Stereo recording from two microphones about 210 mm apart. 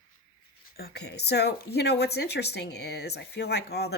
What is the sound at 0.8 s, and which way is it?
Speech, 50° left (ahead or behind).